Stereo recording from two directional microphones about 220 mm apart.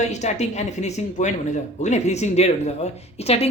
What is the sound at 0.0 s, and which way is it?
A man's voice, 30° left (ahead or behind).